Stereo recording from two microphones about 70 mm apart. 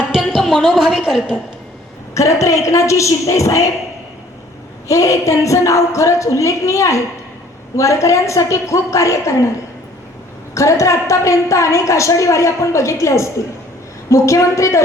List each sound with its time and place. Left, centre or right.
0.1 s a woman's voice: centre
2.1 s a woman's voice: left
4.9 s a woman's voice: left
10.5 s a woman's voice: left